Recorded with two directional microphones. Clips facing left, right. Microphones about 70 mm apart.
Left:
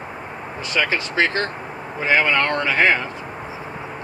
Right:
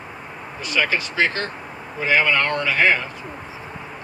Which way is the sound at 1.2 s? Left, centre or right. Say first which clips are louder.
Left 3 dB; left.